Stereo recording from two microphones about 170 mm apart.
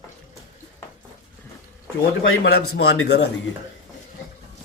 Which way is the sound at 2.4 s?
80° left.